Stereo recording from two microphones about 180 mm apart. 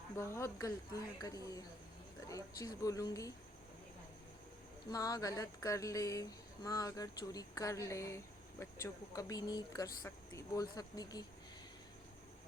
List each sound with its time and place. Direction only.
0.2 s speech: 15° left (ahead or behind)
4.9 s speech: 20° left (ahead or behind)